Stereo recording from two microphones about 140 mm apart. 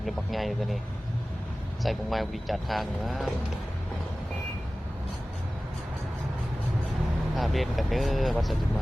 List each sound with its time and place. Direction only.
0.0 s speech: centre (ahead or behind)
1.8 s speech: centre (ahead or behind)
7.3 s speech: centre (ahead or behind)